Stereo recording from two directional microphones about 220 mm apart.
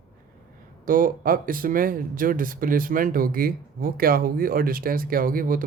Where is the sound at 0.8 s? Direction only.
40° right (ahead or behind).